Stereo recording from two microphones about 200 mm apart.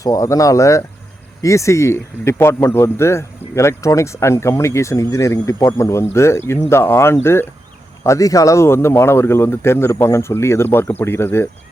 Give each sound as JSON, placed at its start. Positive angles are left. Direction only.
{"t": 0.0, "sound": "speech", "side_deg": 15}